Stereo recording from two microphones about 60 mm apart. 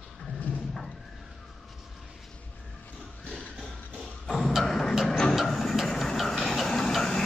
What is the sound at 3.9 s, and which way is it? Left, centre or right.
Thump, centre.